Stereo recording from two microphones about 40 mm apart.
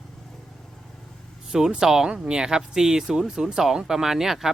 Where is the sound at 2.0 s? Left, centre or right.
Right.